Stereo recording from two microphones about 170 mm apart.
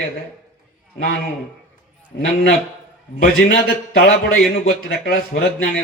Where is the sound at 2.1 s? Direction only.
80° left.